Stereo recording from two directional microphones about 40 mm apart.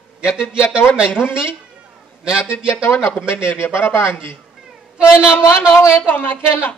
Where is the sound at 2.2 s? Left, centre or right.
Centre.